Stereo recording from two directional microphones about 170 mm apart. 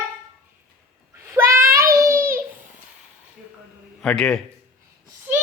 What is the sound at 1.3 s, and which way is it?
Child singing, 15° right (ahead or behind).